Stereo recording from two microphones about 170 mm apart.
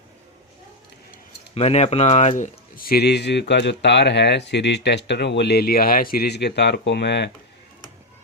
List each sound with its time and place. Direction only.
1.5 s speech: 40° left (ahead or behind); by 7.3 s 90° left